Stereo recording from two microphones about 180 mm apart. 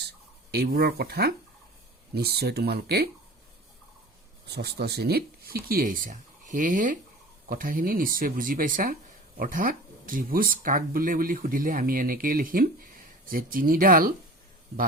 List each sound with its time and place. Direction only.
0.5 s speech: 60° right (ahead or behind)
4.4 s speech: 65° right (ahead or behind)